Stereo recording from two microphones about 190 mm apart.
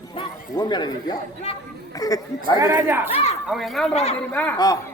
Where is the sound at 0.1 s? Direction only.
25° left (ahead or behind).